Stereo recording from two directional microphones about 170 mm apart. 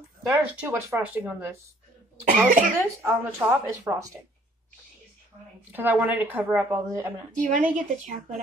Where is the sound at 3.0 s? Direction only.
15° right (ahead or behind).